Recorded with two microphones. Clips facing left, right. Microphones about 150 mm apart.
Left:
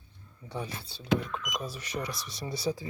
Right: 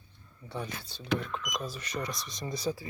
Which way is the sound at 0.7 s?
30° left (ahead or behind).